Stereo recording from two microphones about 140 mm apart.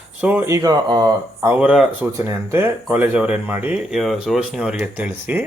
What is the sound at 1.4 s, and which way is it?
Speech, 10° right (ahead or behind).